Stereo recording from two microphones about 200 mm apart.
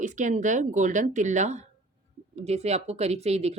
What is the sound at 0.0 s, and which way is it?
A woman's voice, 40° right (ahead or behind).